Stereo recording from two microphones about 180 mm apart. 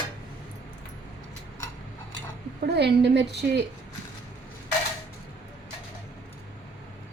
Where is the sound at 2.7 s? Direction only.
65° right (ahead or behind).